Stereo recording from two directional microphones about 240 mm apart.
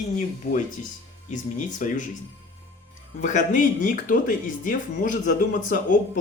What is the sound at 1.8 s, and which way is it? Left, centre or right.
Speech, left.